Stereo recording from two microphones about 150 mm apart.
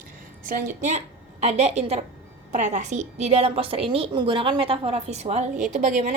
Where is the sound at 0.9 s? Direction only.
50° right (ahead or behind).